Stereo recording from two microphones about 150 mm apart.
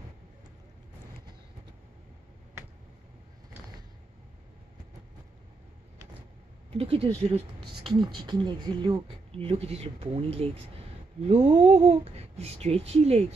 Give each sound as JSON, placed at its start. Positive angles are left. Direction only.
{"t": 6.8, "sound": "speech", "side_deg": -40}
{"t": 7.9, "sound": "speech", "side_deg": -30}